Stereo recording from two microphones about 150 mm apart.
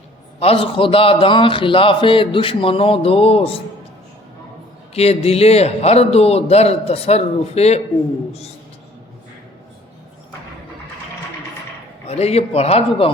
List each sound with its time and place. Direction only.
0.3 s a man's voice: 40° left (ahead or behind)
4.9 s a man's voice: 45° left (ahead or behind)
12.0 s a man's voice: 45° left (ahead or behind)